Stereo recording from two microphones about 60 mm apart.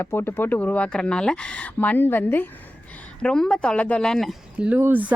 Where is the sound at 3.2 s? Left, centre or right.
Centre.